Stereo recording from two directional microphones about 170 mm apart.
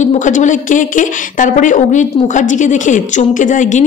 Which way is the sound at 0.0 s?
45° left (ahead or behind).